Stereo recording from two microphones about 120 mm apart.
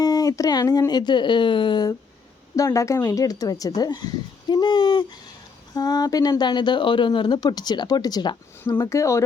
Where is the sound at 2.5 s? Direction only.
25° left (ahead or behind).